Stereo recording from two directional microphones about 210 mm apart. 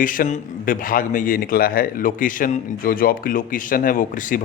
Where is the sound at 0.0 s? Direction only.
40° left (ahead or behind).